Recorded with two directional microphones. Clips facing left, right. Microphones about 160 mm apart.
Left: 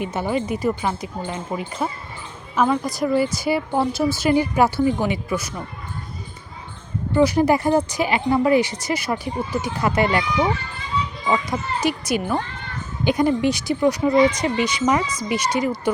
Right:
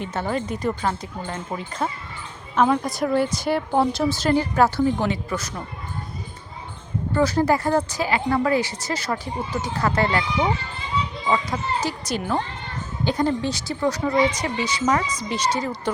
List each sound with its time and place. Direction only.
0.0 s a woman's voice: 10° left (ahead or behind)
7.1 s speech: 15° left (ahead or behind)
11.3 s speech: 15° left (ahead or behind)